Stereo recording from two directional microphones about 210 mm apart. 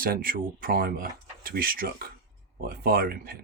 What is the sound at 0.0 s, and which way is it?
Speech, 45° right (ahead or behind).